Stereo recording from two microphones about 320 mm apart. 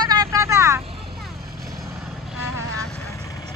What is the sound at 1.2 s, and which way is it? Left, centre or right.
Vehicle, centre.